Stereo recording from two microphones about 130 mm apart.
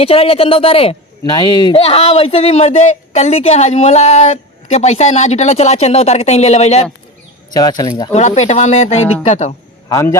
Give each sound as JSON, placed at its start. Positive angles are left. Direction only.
{"t": 0.0, "sound": "speech", "side_deg": 50}
{"t": 1.2, "sound": "speech", "side_deg": 30}
{"t": 1.8, "sound": "a woman's voice", "side_deg": 50}
{"t": 7.5, "sound": "speech", "side_deg": 30}
{"t": 8.1, "sound": "a woman's voice", "side_deg": 60}
{"t": 9.9, "sound": "a man's voice", "side_deg": 25}